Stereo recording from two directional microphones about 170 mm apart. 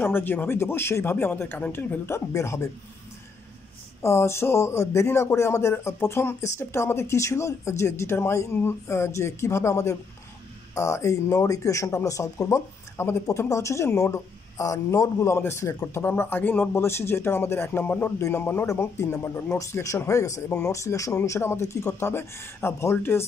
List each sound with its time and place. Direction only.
0.0 s speech: 10° left (ahead or behind)
4.0 s speech: 15° left (ahead or behind)